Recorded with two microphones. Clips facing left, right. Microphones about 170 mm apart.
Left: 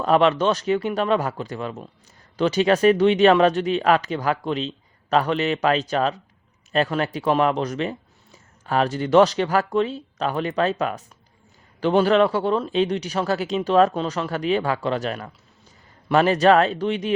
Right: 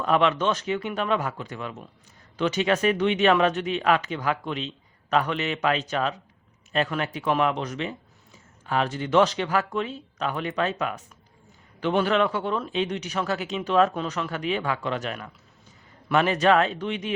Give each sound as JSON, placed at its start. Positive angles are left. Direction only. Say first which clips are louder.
{"t": 0.0, "sound": "speech", "louder": "left 4 dB", "side_deg": 35}